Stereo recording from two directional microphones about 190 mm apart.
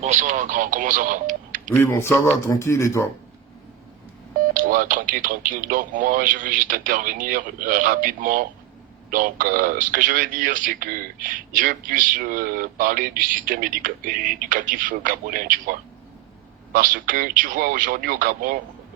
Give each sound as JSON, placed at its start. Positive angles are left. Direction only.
{"t": 0.0, "sound": "speech", "side_deg": -40}
{"t": 1.7, "sound": "speech", "side_deg": 10}
{"t": 4.5, "sound": "speech", "side_deg": -45}
{"t": 16.7, "sound": "speech", "side_deg": -45}